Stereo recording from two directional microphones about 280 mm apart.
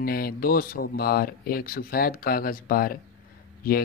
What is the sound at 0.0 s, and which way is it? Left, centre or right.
Speech, left.